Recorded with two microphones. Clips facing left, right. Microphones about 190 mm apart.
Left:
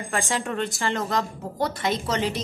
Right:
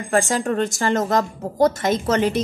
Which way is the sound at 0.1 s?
40° right (ahead or behind).